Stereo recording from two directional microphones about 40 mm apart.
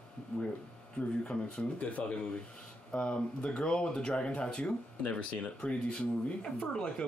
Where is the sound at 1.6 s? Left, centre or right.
Left.